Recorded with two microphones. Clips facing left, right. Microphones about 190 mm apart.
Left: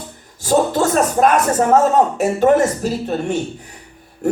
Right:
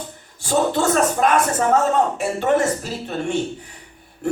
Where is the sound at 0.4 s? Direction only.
40° left (ahead or behind).